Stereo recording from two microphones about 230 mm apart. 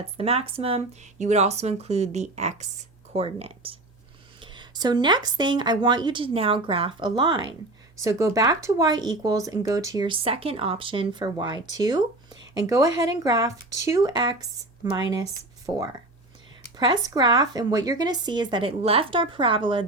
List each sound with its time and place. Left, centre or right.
0.0 s speech: right